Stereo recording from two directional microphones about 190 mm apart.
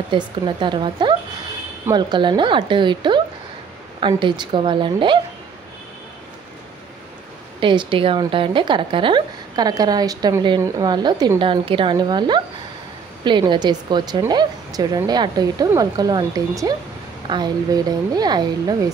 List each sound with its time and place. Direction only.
0.1 s a woman's voice: 25° right (ahead or behind)
7.6 s a woman's voice: 25° right (ahead or behind)